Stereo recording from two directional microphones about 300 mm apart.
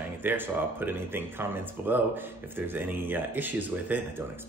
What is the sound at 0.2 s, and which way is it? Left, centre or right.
Speech, centre.